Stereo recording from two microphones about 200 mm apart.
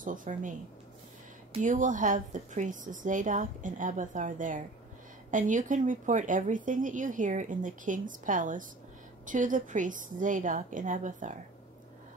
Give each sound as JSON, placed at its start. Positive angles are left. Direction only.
{"t": 0.0, "sound": "speech", "side_deg": -40}